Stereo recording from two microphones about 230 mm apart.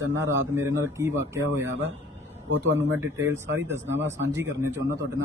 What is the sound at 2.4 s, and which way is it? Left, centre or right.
Speech, right.